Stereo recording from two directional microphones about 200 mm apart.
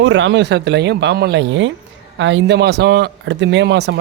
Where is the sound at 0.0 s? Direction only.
65° right (ahead or behind).